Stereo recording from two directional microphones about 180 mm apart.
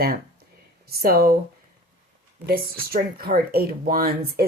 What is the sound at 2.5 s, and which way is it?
A woman's voice, 55° right (ahead or behind).